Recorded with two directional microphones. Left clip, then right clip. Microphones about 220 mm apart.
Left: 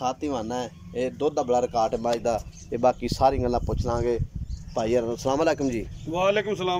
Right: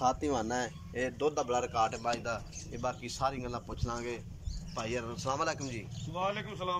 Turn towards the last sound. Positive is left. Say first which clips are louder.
# left 11 dB
turn(degrees=45)  # may be behind; listen again after turning